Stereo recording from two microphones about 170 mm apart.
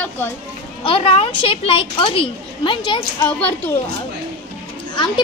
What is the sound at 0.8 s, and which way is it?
A woman's voice, 30° left (ahead or behind).